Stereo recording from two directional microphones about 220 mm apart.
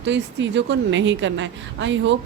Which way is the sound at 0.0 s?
55° right (ahead or behind).